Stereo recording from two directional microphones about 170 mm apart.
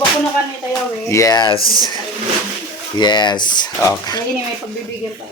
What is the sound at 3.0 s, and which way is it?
Speech, 25° left (ahead or behind).